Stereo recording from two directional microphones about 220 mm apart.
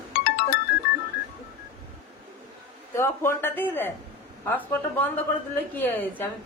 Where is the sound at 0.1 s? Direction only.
45° left (ahead or behind).